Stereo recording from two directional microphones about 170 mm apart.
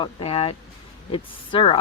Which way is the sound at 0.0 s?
35° left (ahead or behind).